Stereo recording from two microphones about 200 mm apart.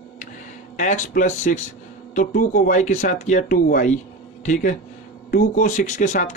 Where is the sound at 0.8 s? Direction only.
40° left (ahead or behind).